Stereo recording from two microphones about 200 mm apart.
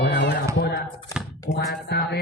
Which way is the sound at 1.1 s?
15° left (ahead or behind).